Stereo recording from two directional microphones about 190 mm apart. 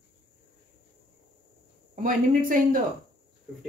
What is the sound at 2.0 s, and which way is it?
Speech, 45° right (ahead or behind).